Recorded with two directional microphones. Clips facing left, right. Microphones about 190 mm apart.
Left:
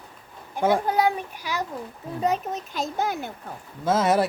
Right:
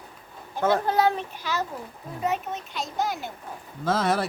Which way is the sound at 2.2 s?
35° left (ahead or behind).